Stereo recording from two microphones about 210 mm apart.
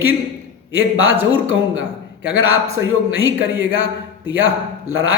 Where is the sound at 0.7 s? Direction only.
70° right (ahead or behind).